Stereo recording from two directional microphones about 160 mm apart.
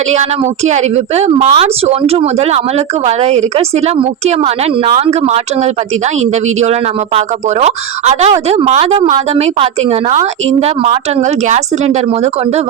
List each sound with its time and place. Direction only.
0.1 s a woman's voice: 45° right (ahead or behind)